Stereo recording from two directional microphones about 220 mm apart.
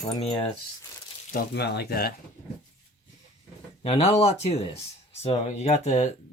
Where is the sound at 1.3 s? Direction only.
50° left (ahead or behind).